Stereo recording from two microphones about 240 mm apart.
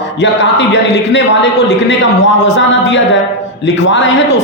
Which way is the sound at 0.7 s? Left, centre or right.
Left.